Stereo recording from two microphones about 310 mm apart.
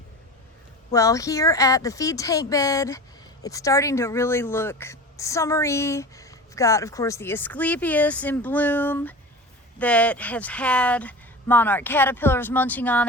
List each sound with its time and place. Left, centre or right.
0.9 s a woman's voice: centre